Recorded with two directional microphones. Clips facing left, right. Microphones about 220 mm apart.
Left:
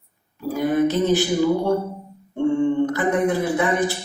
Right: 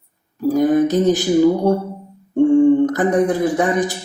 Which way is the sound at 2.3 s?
45° right (ahead or behind).